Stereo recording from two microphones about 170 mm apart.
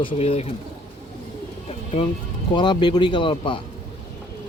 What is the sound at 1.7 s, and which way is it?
Bird, 35° left (ahead or behind).